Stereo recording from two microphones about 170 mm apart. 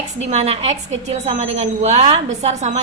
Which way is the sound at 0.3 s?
40° right (ahead or behind).